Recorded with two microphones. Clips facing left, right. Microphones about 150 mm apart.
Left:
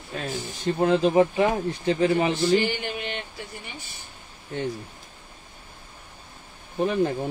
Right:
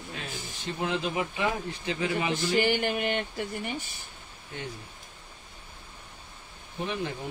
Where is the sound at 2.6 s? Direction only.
55° right (ahead or behind).